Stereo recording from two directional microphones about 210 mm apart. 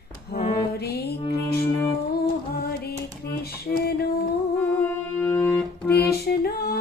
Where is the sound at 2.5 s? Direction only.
50° left (ahead or behind).